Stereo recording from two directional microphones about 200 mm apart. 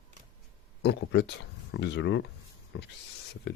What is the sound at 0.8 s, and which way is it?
Speech, 55° left (ahead or behind).